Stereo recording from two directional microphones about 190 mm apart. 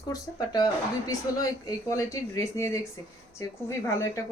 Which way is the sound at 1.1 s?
20° left (ahead or behind).